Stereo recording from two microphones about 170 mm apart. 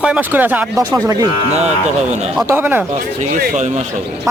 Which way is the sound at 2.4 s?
10° right (ahead or behind).